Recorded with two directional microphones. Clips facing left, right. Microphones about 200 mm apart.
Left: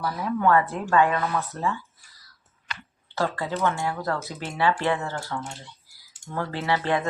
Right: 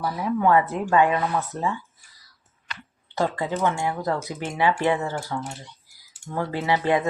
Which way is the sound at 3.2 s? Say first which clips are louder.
Right 2 dB; 15° right (ahead or behind).